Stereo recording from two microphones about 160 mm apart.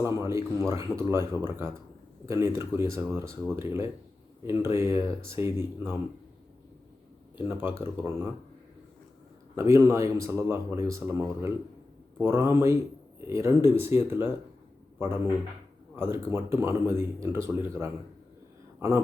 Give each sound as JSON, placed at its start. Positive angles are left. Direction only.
{"t": 0.0, "sound": "speech", "side_deg": -20}
{"t": 7.4, "sound": "speech", "side_deg": -15}
{"t": 9.6, "sound": "a man's voice", "side_deg": -20}